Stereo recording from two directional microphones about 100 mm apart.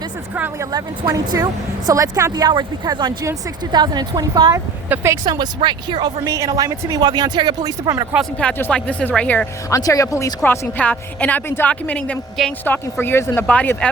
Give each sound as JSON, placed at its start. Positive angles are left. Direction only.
{"t": 0.6, "sound": "speech", "side_deg": -40}
{"t": 2.3, "sound": "a woman's voice", "side_deg": -45}
{"t": 4.9, "sound": "speech", "side_deg": -25}
{"t": 5.2, "sound": "a woman's voice", "side_deg": -45}
{"t": 6.2, "sound": "speech", "side_deg": -35}
{"t": 8.2, "sound": "a woman's voice", "side_deg": 10}
{"t": 9.6, "sound": "speech", "side_deg": 35}
{"t": 10.4, "sound": "a woman's voice", "side_deg": 20}
{"t": 13.5, "sound": "a woman's voice", "side_deg": 15}